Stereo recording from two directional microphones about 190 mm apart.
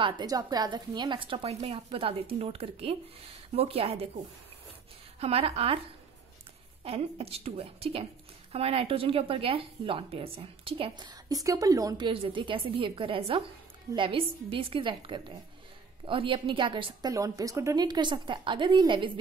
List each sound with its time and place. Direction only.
0.0 s a woman's voice: 20° right (ahead or behind)
5.2 s speech: 30° right (ahead or behind)
6.8 s a woman's voice: 30° right (ahead or behind)